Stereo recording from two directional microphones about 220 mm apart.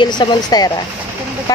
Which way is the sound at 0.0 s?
20° left (ahead or behind).